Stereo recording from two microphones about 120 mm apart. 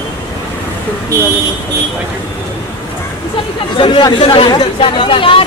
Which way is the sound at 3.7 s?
40° left (ahead or behind).